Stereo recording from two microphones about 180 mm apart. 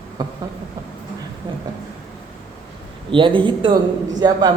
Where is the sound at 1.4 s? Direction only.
25° right (ahead or behind).